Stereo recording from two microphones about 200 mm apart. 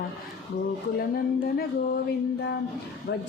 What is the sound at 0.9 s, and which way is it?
Music, 50° left (ahead or behind).